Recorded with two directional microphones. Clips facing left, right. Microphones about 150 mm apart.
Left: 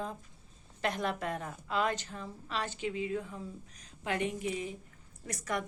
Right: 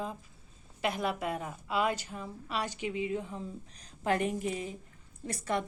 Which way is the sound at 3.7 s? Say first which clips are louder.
Right 6 dB; 40° right (ahead or behind).